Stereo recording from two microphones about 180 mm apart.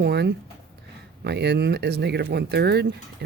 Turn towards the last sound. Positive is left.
turn(degrees=-65)  # may be behind; listen again after turning